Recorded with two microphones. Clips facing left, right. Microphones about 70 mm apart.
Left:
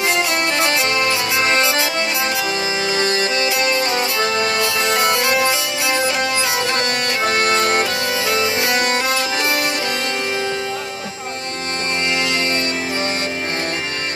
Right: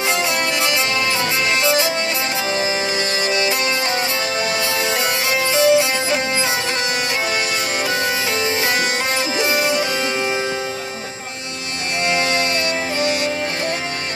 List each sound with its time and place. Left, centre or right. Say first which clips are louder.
0.6 s music: left 2 dB; left
3.6 s music: left 2 dB; left
5.6 s music: right 5 dB; right
7.4 s music: left 6 dB; left
9.4 s music: right 1 dB; right